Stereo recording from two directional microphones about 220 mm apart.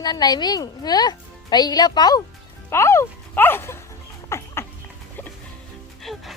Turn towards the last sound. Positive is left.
turn(degrees=0)  # may be behind; listen again after turning